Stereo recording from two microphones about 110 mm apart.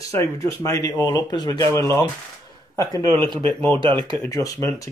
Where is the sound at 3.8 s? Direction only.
45° right (ahead or behind).